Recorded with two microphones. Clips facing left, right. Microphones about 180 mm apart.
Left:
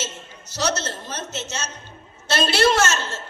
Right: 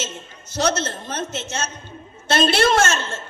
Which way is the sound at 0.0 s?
55° right (ahead or behind).